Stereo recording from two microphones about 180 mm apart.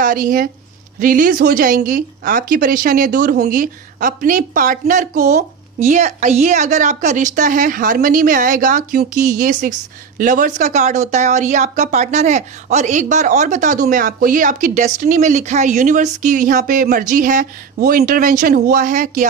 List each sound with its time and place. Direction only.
0.0 s a woman's voice: 50° right (ahead or behind)